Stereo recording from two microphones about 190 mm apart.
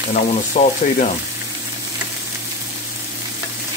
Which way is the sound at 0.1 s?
40° left (ahead or behind).